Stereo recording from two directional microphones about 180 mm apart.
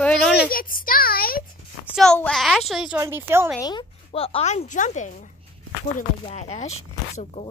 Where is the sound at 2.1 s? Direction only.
5° left (ahead or behind).